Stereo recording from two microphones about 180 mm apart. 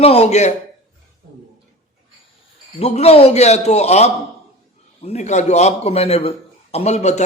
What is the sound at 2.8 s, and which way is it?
Speech, 35° left (ahead or behind).